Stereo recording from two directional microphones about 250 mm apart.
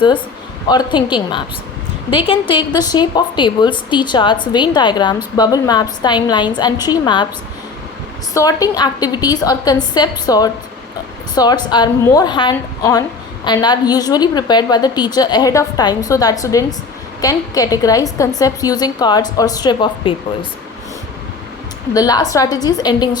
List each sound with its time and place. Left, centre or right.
0.7 s a woman's voice: centre
8.3 s a woman's voice: centre
21.9 s a woman's voice: centre